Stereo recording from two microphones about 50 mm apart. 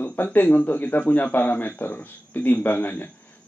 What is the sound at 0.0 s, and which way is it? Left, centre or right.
A man's voice, left.